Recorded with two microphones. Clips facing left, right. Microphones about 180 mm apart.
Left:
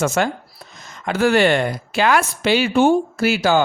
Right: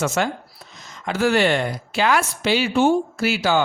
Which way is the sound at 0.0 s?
50° left (ahead or behind).